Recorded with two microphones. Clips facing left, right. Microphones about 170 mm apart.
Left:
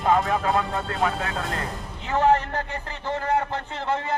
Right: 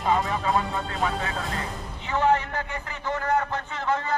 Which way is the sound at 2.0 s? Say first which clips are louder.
Left 2 dB; 40° left (ahead or behind).